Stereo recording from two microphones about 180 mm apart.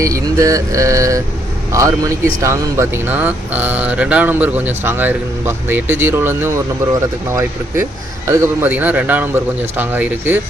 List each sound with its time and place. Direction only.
0.0 s speech: 20° right (ahead or behind)
8.3 s speech: 15° right (ahead or behind)